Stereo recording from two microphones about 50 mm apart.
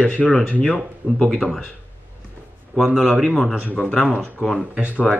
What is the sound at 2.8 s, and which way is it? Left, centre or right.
Speech, centre.